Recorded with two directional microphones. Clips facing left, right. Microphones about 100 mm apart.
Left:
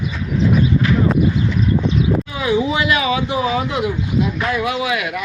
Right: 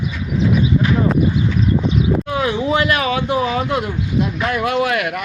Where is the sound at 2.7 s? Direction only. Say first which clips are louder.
Right 1 dB; 45° right (ahead or behind).